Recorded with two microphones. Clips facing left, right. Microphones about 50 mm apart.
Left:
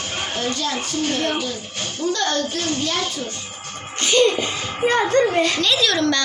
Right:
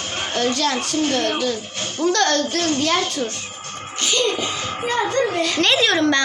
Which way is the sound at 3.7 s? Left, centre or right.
Centre.